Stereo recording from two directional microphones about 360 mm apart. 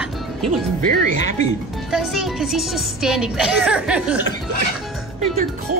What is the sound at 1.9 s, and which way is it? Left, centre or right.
A woman's voice, centre.